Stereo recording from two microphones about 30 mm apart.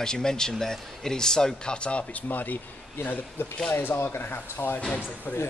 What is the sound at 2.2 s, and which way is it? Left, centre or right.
Speech, left.